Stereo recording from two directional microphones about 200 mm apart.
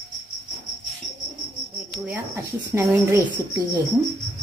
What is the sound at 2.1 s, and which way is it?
Speech, 15° right (ahead or behind).